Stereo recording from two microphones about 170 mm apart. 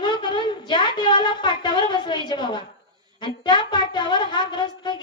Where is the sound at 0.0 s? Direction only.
25° left (ahead or behind).